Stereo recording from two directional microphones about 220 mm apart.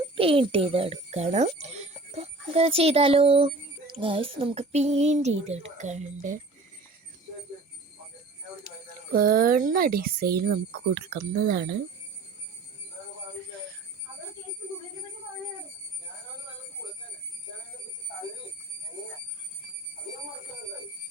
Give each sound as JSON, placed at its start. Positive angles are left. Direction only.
{"t": 0.2, "sound": "speech", "side_deg": -25}
{"t": 9.1, "sound": "speech", "side_deg": -40}